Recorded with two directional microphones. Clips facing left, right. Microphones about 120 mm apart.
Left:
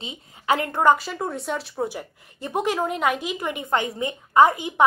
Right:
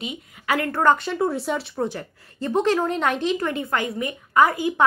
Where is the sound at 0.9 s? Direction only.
Centre (ahead or behind).